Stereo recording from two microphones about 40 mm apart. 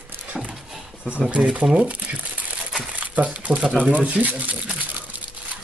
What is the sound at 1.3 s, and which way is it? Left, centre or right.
Speech, right.